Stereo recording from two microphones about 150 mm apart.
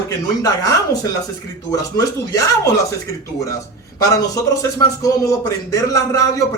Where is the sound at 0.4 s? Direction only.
25° left (ahead or behind).